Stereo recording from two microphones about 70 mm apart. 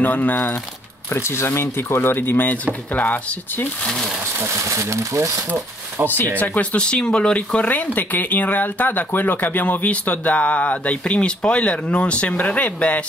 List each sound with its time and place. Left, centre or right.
0.0 s speech: left
1.1 s speech: left
4.6 s speech: right
6.3 s speech: left